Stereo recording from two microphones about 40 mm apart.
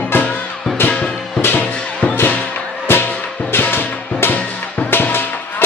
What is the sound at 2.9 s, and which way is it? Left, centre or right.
Music, left.